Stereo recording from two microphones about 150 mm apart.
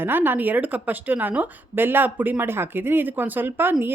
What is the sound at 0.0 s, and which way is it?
A woman's voice, 15° right (ahead or behind).